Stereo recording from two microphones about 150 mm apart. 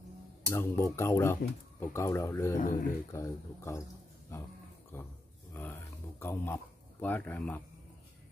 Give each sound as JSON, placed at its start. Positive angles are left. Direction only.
{"t": 0.5, "sound": "speech", "side_deg": 15}
{"t": 2.6, "sound": "speech", "side_deg": 65}
{"t": 3.1, "sound": "speech", "side_deg": 20}
{"t": 5.5, "sound": "a sound", "side_deg": 15}